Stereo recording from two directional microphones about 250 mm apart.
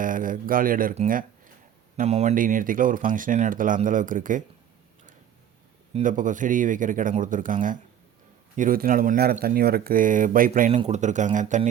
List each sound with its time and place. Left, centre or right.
0.0 s speech: right
5.9 s speech: right